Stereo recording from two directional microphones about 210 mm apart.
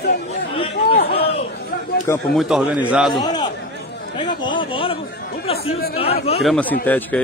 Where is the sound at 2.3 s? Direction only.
Centre (ahead or behind).